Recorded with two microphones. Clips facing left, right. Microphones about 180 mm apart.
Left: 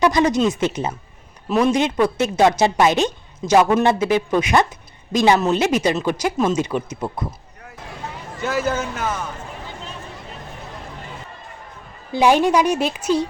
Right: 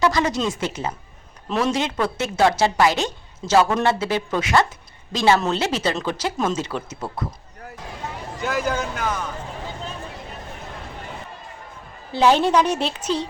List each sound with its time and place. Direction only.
0.0 s a woman's voice: 20° left (ahead or behind)
6.3 s speech: centre (ahead or behind)
6.6 s a woman's voice: 15° left (ahead or behind)
8.4 s speech: 5° left (ahead or behind)
12.1 s a woman's voice: 10° left (ahead or behind)